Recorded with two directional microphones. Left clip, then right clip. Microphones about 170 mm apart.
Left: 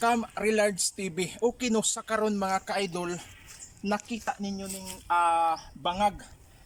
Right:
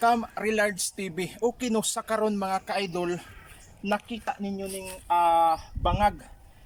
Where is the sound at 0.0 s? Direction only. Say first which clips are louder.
Right 2 dB; centre (ahead or behind).